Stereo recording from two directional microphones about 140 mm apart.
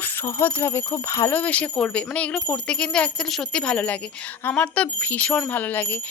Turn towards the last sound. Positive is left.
turn(degrees=15)  # may be behind; listen again after turning